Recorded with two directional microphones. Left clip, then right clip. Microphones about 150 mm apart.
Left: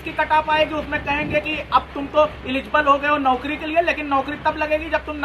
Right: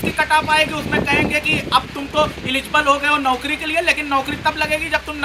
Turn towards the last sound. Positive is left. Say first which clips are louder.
# right 2 dB
turn(degrees=-10)  # may be behind; listen again after turning